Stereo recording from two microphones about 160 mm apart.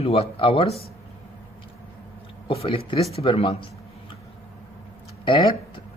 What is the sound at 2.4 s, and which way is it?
Speech, 35° left (ahead or behind).